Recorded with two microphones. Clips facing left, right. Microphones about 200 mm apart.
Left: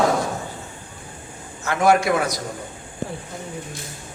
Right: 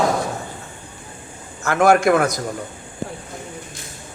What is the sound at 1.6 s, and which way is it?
Speech, 50° right (ahead or behind).